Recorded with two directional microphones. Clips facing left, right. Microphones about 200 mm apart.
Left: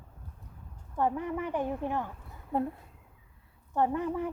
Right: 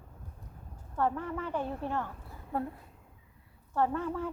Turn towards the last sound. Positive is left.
turn(degrees=15)  # may be behind; listen again after turning